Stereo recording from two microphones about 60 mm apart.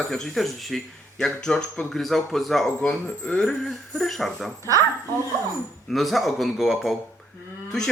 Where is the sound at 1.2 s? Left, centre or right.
Centre.